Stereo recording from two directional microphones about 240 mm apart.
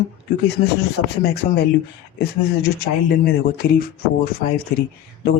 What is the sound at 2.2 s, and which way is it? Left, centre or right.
Speech, left.